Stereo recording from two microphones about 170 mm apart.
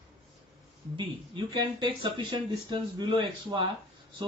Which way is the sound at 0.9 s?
25° right (ahead or behind).